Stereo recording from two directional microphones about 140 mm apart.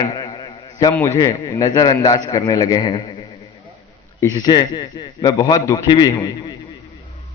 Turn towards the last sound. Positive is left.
turn(degrees=30)  # may be behind; listen again after turning